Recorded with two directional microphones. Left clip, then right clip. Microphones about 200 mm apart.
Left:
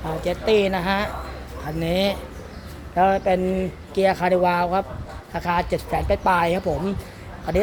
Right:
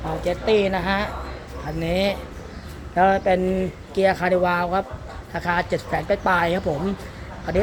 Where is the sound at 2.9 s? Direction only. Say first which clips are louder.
Right 1 dB; 5° left (ahead or behind).